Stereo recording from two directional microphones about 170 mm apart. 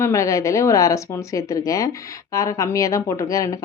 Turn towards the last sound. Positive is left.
turn(degrees=20)  # may be behind; listen again after turning